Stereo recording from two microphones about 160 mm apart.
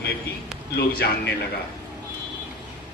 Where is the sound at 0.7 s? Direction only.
90° left.